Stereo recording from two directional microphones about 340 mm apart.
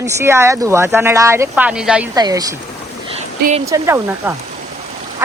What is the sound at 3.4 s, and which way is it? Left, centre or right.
Speech, right.